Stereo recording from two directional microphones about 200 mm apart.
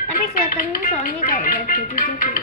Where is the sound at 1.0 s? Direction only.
40° left (ahead or behind).